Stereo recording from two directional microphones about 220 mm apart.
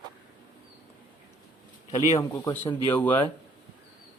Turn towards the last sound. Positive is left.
turn(degrees=10)  # may be behind; listen again after turning